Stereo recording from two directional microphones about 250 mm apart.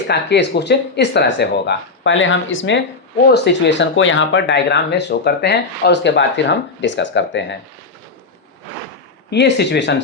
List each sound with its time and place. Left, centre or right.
0.1 s speech: left
9.3 s speech: left